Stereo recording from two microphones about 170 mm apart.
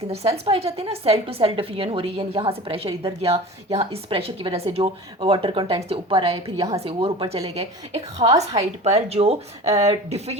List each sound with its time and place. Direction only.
0.3 s a woman's voice: 30° right (ahead or behind)